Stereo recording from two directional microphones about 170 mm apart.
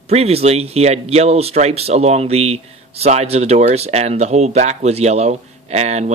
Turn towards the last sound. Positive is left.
turn(degrees=-40)  # may be behind; listen again after turning